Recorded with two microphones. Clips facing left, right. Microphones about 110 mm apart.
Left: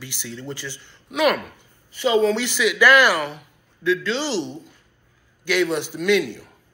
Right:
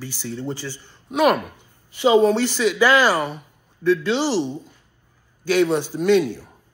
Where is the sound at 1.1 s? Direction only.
45° right (ahead or behind).